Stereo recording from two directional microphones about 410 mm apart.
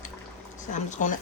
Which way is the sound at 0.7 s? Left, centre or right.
Centre.